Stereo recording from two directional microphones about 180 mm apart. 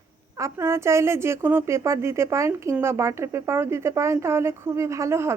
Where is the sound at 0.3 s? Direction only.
15° right (ahead or behind).